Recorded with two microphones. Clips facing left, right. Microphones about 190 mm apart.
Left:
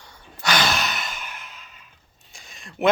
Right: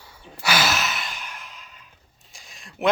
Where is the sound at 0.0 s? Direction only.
5° right (ahead or behind).